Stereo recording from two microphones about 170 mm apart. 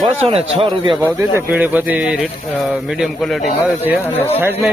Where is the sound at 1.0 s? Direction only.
10° right (ahead or behind).